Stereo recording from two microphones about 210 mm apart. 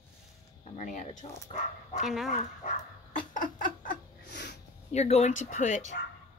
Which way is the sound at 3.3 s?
40° left (ahead or behind).